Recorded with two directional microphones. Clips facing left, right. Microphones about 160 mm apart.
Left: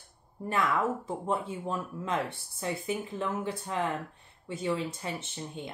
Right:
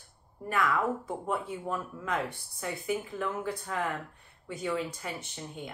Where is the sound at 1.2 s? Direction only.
25° left (ahead or behind).